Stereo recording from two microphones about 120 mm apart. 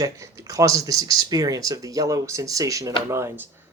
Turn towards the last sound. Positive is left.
turn(degrees=-25)  # may be behind; listen again after turning